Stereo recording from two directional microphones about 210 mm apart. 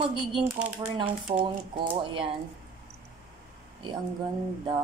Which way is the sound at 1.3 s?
35° right (ahead or behind).